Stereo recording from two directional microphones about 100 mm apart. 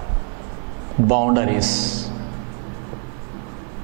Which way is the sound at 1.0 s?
10° right (ahead or behind).